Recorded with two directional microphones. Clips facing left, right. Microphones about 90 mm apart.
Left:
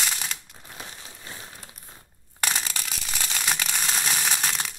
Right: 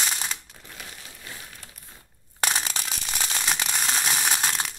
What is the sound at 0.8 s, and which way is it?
Crumpling, 25° left (ahead or behind).